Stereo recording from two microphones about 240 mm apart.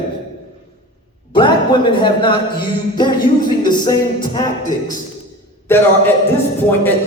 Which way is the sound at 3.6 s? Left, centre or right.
Centre.